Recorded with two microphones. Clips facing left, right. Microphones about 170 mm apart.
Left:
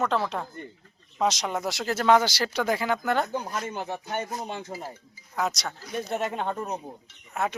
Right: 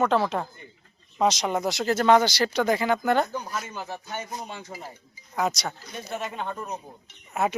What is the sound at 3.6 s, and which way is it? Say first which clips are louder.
Speech: left 4 dB; 60° left (ahead or behind).